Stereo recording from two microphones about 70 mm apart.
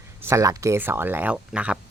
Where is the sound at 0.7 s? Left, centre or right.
Right.